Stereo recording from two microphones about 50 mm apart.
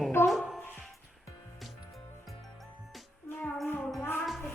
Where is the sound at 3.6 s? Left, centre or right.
Left.